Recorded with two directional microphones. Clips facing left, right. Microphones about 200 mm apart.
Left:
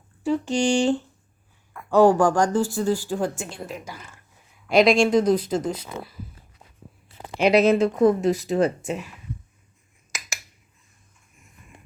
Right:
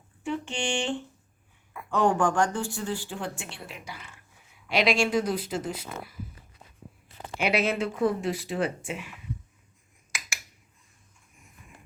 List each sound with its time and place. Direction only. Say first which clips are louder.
0.2 s speech: left 9 dB; 35° left (ahead or behind)
7.3 s speech: left 9 dB; 40° left (ahead or behind)
10.1 s a sound: left 2 dB; 40° left (ahead or behind)